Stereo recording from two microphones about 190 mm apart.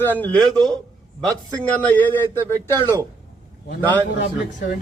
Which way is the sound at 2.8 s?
20° right (ahead or behind).